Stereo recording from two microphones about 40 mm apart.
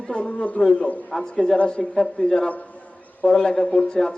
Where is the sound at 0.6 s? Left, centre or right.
Centre.